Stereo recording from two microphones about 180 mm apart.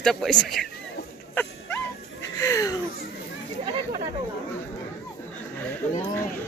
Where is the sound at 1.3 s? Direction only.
10° left (ahead or behind).